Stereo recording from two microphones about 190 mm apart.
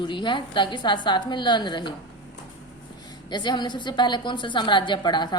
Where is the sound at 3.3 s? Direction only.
25° left (ahead or behind).